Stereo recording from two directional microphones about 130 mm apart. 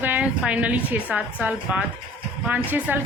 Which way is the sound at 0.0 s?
10° right (ahead or behind).